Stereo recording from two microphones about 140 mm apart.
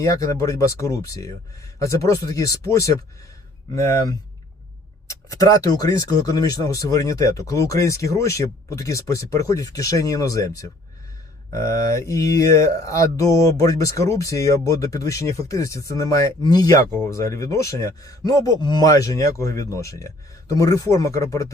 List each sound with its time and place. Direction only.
0.0 s mantra: 20° left (ahead or behind)